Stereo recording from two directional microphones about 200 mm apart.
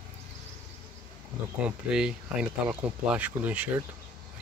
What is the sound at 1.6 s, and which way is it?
Speech, 5° right (ahead or behind).